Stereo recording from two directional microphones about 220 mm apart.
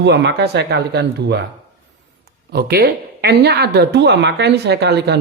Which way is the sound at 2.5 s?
45° right (ahead or behind).